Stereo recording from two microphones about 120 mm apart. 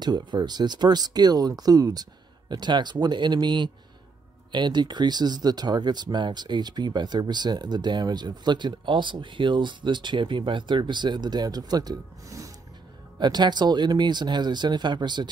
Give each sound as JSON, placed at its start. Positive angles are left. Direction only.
{"t": 0.0, "sound": "speech", "side_deg": -35}